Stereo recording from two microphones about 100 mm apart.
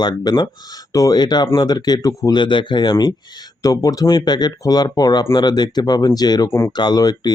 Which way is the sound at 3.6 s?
35° left (ahead or behind).